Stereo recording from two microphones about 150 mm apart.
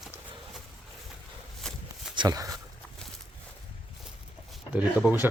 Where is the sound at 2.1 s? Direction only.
25° right (ahead or behind).